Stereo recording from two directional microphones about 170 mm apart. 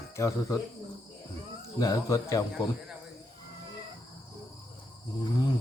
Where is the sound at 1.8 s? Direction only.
20° left (ahead or behind).